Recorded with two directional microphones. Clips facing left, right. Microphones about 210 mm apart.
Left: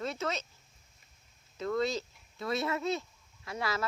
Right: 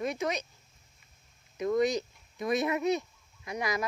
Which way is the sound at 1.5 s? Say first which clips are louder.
Right 4 dB; 15° right (ahead or behind).